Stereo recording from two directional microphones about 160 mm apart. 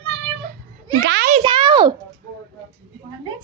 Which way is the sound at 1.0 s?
90° right.